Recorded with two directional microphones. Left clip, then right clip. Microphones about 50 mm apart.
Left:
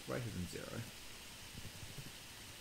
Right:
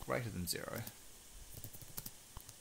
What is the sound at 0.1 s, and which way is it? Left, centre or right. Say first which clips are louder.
Speech: right 5 dB; right.